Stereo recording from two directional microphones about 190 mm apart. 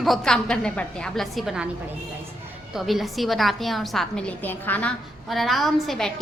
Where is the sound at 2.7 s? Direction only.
Centre (ahead or behind).